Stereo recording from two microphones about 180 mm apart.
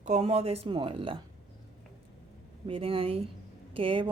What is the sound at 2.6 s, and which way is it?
A woman's voice, 30° right (ahead or behind).